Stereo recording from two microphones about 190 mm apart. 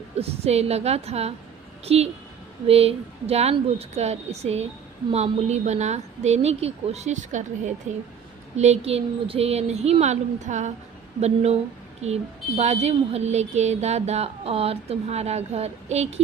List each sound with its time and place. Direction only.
0.2 s speech: 35° right (ahead or behind)